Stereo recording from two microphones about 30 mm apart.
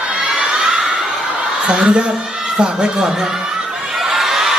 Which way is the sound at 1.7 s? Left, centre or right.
Right.